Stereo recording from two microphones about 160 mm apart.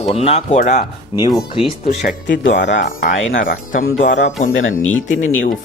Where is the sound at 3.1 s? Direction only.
60° left (ahead or behind); by 4.3 s 90° left.